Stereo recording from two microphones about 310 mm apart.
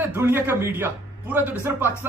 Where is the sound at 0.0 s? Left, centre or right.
Centre.